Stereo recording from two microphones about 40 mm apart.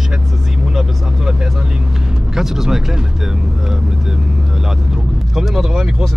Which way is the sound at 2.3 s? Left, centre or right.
Centre.